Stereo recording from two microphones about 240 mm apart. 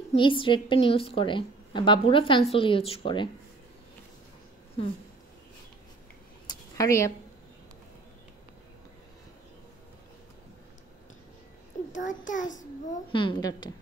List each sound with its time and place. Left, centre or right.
0.1 s a woman's voice: left
6.4 s a sound: centre
12.1 s a child's voice: left
13.2 s a woman's voice: centre